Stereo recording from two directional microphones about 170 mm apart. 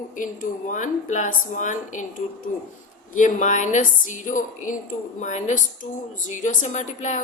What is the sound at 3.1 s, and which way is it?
A woman's voice, 45° left (ahead or behind).